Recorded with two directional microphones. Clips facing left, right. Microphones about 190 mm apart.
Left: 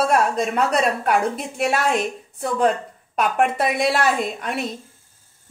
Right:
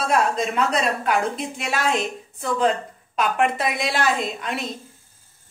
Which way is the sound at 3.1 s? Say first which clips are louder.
Left 2 dB; 55° left (ahead or behind).